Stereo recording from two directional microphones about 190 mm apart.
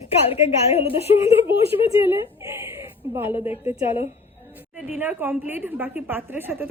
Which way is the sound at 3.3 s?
25° left (ahead or behind).